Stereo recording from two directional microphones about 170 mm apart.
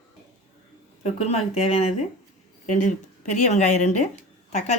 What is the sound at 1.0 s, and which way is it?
Speech, 40° left (ahead or behind).